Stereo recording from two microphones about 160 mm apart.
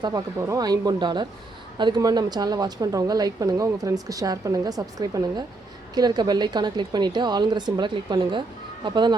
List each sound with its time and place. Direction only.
0.0 s a woman's voice: 20° right (ahead or behind)